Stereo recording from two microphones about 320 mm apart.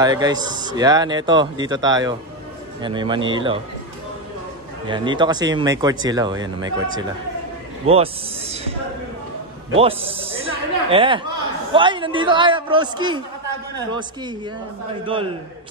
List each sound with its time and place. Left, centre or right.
0.0 s speech: centre
4.8 s speech: centre
9.8 s speech: centre